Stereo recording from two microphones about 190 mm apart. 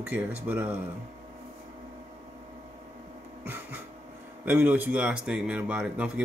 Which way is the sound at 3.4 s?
10° right (ahead or behind).